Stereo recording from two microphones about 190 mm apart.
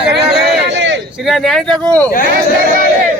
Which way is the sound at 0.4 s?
70° right (ahead or behind).